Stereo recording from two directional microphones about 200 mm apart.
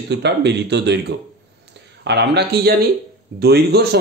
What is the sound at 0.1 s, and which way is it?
A man's voice, 60° right (ahead or behind).